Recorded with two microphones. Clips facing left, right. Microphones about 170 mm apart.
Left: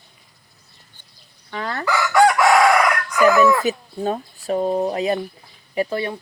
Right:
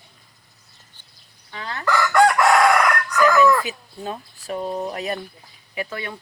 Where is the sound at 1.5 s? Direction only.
50° left (ahead or behind).